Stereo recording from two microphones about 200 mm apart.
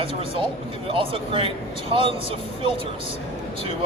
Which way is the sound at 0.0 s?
25° right (ahead or behind).